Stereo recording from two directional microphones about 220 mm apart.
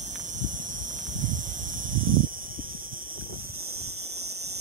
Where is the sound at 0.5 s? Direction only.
35° right (ahead or behind).